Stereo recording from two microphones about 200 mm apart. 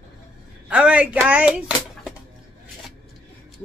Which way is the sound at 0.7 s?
5° right (ahead or behind).